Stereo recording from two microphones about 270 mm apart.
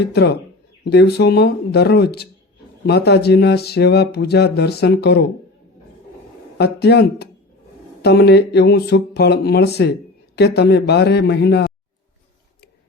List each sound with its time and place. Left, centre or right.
0.0 s speech: left
6.6 s speech: left